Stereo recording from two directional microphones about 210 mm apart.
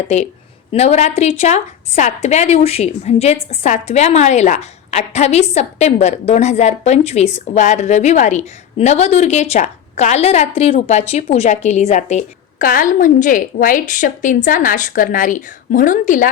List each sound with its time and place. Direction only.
0.7 s a woman's voice: 30° left (ahead or behind)